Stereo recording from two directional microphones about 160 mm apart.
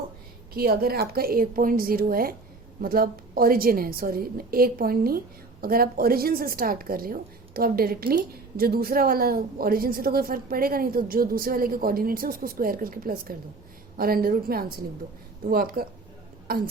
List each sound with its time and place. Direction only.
0.5 s a woman's voice: 70° right (ahead or behind)